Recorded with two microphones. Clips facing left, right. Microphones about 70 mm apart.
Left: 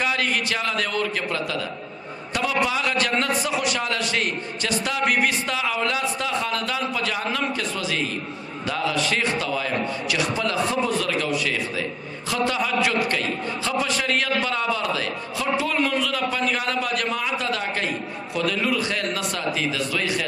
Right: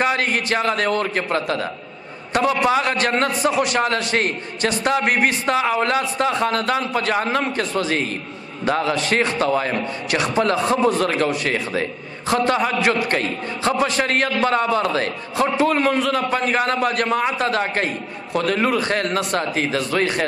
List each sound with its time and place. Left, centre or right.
0.0 s a man's voice: right